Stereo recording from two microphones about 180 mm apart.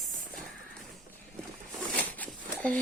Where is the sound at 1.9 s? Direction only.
10° left (ahead or behind).